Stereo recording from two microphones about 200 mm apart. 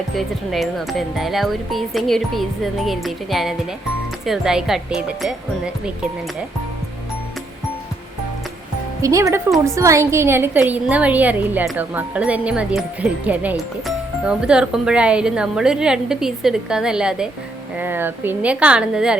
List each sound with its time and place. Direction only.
0.2 s a woman's voice: centre (ahead or behind)
9.0 s a woman's voice: 15° right (ahead or behind)